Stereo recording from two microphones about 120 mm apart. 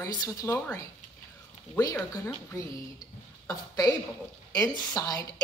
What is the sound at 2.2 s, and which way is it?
A woman's voice, 25° left (ahead or behind).